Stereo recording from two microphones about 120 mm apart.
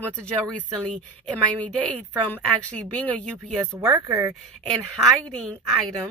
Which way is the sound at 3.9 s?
30° right (ahead or behind).